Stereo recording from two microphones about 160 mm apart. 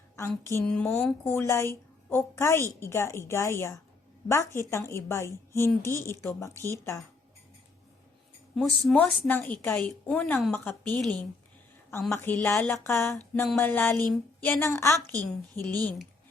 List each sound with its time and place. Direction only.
0.2 s a woman's voice: 15° left (ahead or behind)
8.5 s a woman's voice: 5° left (ahead or behind)
12.5 s a sound: centre (ahead or behind)
12.8 s a woman's voice: 15° left (ahead or behind)